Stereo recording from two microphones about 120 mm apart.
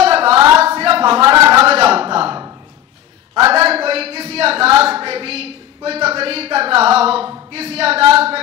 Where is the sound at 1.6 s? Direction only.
55° right (ahead or behind).